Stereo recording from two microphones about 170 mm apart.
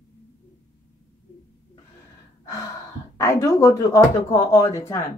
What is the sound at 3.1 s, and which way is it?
Speech, 20° left (ahead or behind).